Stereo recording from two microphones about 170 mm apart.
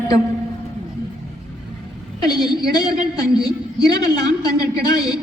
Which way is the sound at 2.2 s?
25° left (ahead or behind).